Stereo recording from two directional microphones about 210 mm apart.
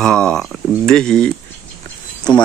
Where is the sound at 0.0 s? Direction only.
5° left (ahead or behind).